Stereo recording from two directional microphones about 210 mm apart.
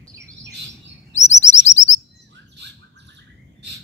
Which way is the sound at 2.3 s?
55° right (ahead or behind).